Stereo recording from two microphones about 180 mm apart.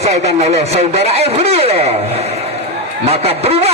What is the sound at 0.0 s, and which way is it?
Speech, 35° right (ahead or behind).